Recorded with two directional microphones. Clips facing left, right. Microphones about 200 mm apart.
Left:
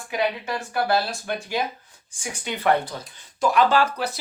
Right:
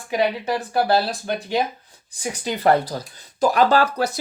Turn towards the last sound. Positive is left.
turn(degrees=-45)  # may be behind; listen again after turning